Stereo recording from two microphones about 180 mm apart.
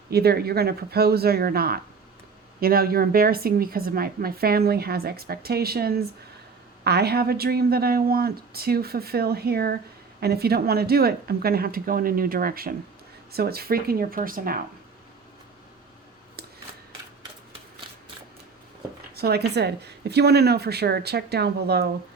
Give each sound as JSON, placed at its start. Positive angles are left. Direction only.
{"t": 0.1, "sound": "a woman's voice", "side_deg": -60}
{"t": 19.1, "sound": "a woman's voice", "side_deg": -65}